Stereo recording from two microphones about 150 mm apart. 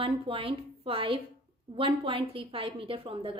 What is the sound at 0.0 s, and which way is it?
A woman's voice, 35° right (ahead or behind).